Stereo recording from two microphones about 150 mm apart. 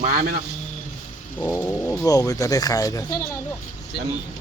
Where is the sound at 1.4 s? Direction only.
15° left (ahead or behind).